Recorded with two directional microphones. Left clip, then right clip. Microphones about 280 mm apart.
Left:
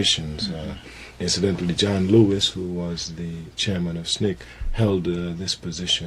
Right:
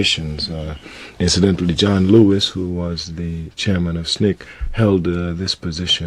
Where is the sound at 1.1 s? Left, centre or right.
Right.